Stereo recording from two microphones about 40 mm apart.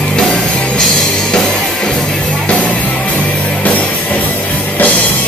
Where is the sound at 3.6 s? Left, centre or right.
Left.